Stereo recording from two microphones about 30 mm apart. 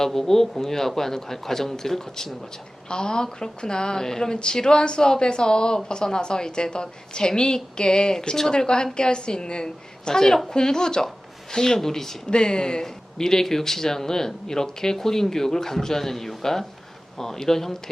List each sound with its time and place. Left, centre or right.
0.0 s speech: centre
2.9 s a woman's voice: left
12.3 s speech: left